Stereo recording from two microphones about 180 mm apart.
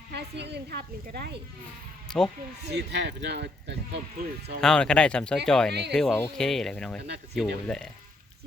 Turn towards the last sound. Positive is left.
turn(degrees=0)  # may be behind; listen again after turning